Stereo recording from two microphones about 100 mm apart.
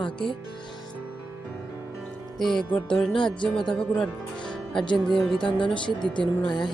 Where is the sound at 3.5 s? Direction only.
5° left (ahead or behind).